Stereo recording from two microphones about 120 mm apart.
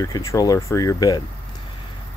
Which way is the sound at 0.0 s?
30° left (ahead or behind).